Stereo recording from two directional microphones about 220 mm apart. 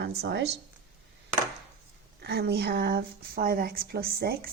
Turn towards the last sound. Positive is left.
turn(degrees=-45)  # may be behind; listen again after turning